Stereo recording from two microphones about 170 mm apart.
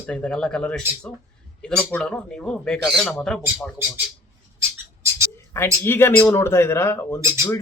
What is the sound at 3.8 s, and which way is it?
Speech, 15° right (ahead or behind).